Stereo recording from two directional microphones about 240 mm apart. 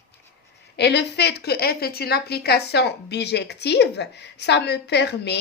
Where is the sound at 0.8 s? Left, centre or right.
Left.